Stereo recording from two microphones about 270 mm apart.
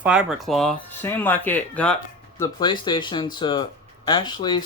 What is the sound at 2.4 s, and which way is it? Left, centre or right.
Speech, centre.